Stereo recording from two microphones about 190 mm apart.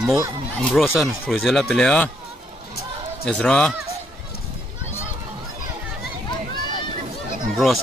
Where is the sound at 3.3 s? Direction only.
5° left (ahead or behind).